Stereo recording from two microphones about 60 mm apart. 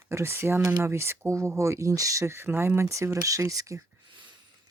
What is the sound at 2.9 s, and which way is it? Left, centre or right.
Speech, right.